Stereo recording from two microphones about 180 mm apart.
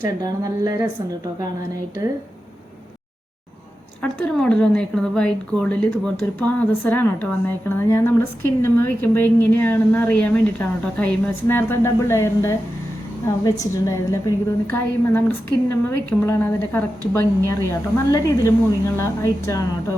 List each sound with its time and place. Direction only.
0.2 s a woman's voice: 20° right (ahead or behind)
4.0 s a woman's voice: 5° left (ahead or behind)